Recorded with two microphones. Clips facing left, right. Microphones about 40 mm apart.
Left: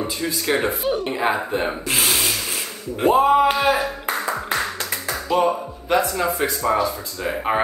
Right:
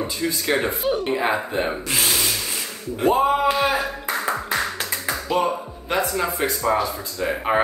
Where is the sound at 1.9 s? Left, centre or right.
Left.